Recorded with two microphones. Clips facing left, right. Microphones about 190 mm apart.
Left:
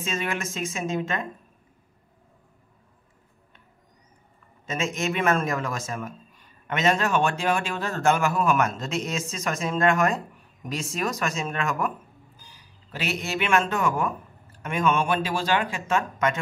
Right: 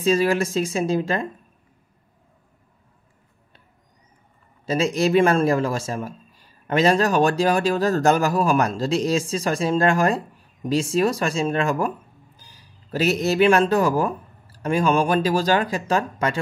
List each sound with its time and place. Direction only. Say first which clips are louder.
0.0 s a man's voice: right 10 dB; 35° right (ahead or behind)
4.6 s a man's voice: right 7 dB; 35° right (ahead or behind)